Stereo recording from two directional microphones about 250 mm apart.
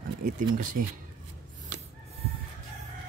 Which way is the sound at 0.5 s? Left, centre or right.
Right.